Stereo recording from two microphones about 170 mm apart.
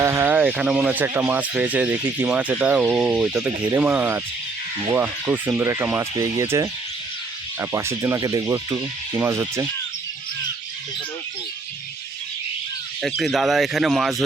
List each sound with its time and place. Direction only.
0.0 s speech: 15° right (ahead or behind)
13.0 s speech: centre (ahead or behind)